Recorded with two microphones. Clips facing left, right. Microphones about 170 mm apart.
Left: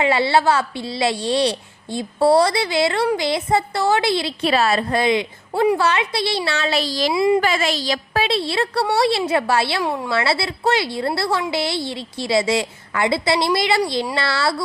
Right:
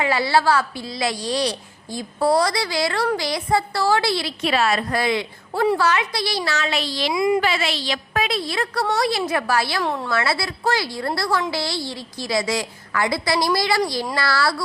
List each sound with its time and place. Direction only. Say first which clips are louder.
0.0 s a woman's voice: left 2 dB; 25° left (ahead or behind)
4.5 s a woman's voice: left 2 dB; 35° left (ahead or behind)
7.4 s a woman's voice: left 3 dB; 45° left (ahead or behind); by 14.5 s 25° left (ahead or behind)